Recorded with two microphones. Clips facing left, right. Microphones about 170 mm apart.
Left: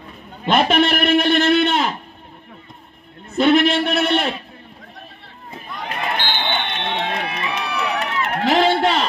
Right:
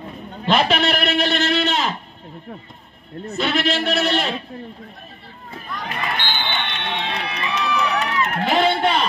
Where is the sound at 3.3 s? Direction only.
55° left (ahead or behind).